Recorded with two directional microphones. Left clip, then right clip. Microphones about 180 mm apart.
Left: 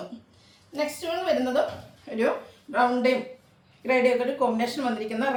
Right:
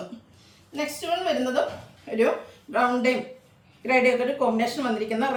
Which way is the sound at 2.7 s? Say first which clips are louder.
Even; 20° right (ahead or behind).